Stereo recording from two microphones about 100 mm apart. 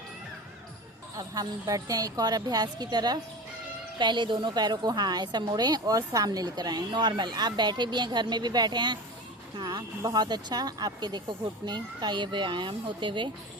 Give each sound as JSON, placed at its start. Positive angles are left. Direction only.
{"t": 1.1, "sound": "a woman's voice", "side_deg": -35}